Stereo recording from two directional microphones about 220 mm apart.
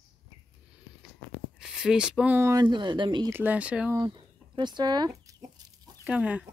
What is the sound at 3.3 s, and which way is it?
Speech, 5° right (ahead or behind).